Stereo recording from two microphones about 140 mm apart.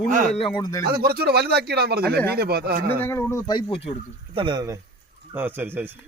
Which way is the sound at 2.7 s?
90° right.